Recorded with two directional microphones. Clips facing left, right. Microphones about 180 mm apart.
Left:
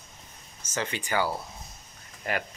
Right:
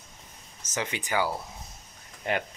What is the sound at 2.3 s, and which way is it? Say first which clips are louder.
Speech: right 2 dB; 25° right (ahead or behind).